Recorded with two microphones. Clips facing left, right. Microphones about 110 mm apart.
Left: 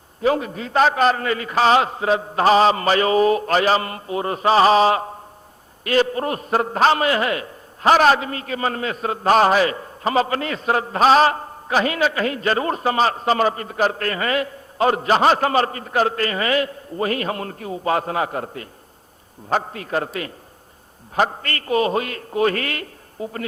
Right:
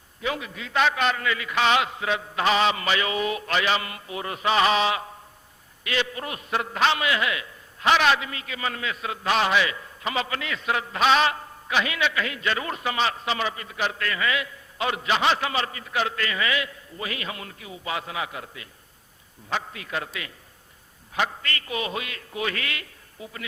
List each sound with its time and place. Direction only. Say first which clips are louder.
0.2 s a man's voice: left 10 dB; 40° left (ahead or behind)
21.2 s a man's voice: left 6 dB; 40° left (ahead or behind)